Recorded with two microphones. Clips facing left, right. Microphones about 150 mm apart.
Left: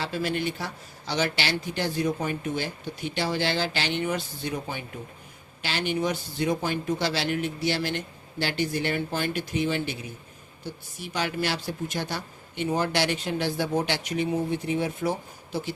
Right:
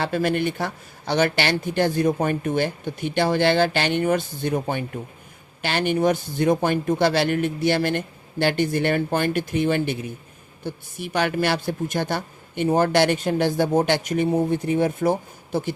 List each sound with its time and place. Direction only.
0.0 s a man's voice: 55° right (ahead or behind)